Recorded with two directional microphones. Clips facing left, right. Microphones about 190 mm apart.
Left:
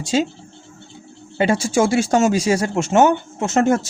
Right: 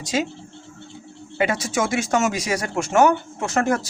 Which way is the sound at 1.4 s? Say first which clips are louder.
Left 5 dB; 30° left (ahead or behind).